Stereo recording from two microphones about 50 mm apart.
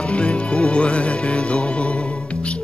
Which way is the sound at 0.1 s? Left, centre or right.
Left.